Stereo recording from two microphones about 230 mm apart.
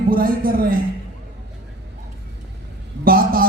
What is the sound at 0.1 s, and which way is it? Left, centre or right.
Speech, right.